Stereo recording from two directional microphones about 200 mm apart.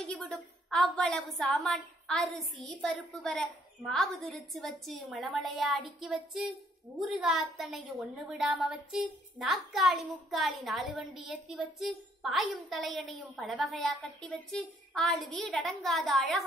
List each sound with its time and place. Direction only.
0.0 s a woman's voice: 5° left (ahead or behind)